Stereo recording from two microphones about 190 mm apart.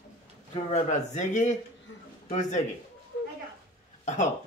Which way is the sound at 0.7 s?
40° left (ahead or behind).